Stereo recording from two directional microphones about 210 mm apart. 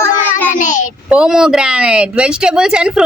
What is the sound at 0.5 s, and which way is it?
Child singing, 40° left (ahead or behind).